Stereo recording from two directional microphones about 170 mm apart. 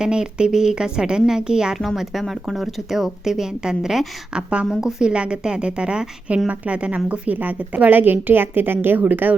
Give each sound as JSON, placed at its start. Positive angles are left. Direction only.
{"t": 0.0, "sound": "a woman's voice", "side_deg": -5}